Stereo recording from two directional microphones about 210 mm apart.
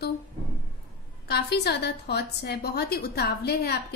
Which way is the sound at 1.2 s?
50° left (ahead or behind).